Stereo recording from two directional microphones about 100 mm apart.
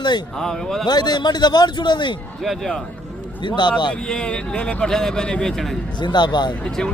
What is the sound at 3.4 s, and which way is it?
Speech, 50° left (ahead or behind).